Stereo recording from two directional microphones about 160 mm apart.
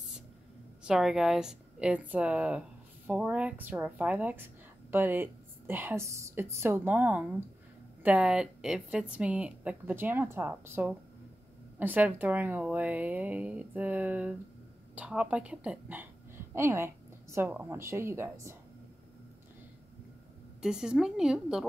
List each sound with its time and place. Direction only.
0.8 s a woman's voice: centre (ahead or behind)
20.6 s a woman's voice: 5° right (ahead or behind)